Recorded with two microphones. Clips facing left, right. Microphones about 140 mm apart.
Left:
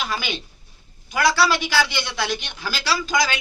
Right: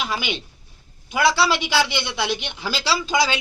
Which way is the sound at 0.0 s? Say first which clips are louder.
Right 1 dB; 20° right (ahead or behind).